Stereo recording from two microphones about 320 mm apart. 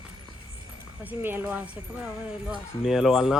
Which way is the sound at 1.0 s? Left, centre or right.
Centre.